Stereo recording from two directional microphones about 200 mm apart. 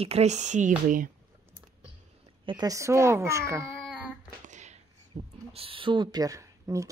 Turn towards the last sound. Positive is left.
turn(degrees=-15)  # may be behind; listen again after turning